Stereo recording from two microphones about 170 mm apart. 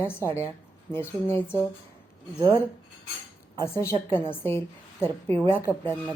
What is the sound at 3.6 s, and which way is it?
A woman's voice, 15° left (ahead or behind).